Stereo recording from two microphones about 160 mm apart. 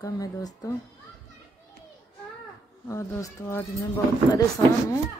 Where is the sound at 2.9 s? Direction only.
15° left (ahead or behind).